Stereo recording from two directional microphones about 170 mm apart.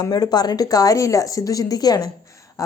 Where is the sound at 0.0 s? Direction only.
20° left (ahead or behind).